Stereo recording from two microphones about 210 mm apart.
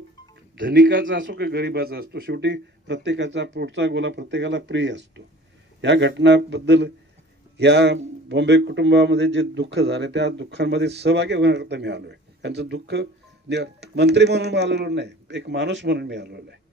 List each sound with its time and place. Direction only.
0.6 s speech: 50° right (ahead or behind)